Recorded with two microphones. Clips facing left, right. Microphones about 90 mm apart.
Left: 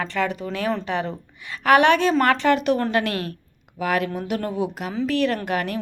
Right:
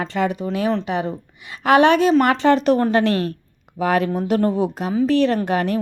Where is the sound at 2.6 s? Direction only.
35° right (ahead or behind).